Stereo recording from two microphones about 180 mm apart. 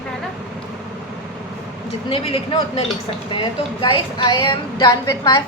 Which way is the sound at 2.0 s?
30° left (ahead or behind).